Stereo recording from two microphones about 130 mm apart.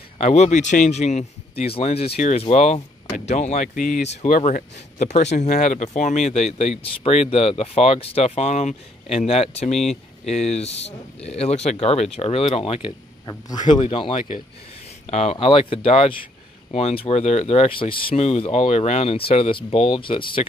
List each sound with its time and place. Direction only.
0.2 s speech: 60° left (ahead or behind)
13.2 s speech: 30° left (ahead or behind); by 14.2 s 45° left (ahead or behind)
15.0 s speech: 60° left (ahead or behind)
15.3 s speech: 45° left (ahead or behind)